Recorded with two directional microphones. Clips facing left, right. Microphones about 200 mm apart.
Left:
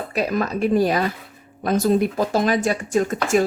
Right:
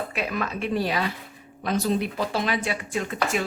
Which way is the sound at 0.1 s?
40° left (ahead or behind).